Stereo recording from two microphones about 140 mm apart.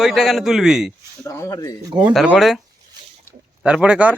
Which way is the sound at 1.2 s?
20° left (ahead or behind).